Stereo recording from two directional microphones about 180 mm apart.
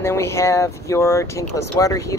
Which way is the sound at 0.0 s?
15° left (ahead or behind).